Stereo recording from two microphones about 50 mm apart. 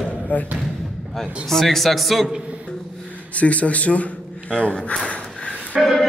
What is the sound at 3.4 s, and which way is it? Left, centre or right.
A man's voice, left.